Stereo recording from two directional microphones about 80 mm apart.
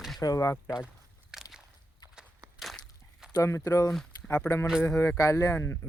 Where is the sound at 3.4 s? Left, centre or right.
Left.